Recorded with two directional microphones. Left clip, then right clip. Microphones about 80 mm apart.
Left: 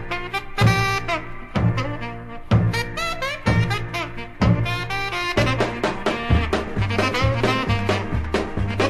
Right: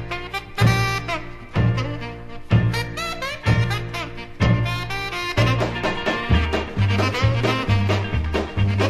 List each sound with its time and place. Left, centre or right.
0.1 s music: centre